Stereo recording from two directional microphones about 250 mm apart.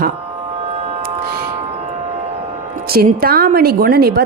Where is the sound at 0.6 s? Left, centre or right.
Right.